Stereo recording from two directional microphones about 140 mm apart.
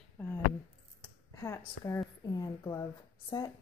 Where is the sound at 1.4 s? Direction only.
20° left (ahead or behind).